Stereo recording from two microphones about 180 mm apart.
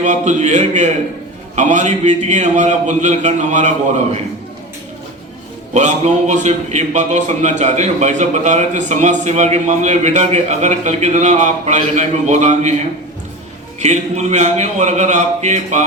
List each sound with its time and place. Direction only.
0.0 s a man's voice: 40° right (ahead or behind)
5.7 s a man's voice: 40° right (ahead or behind)
13.8 s a man's voice: 40° right (ahead or behind)